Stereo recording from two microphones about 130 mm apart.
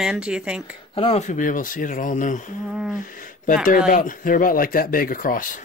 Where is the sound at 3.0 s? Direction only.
90° left.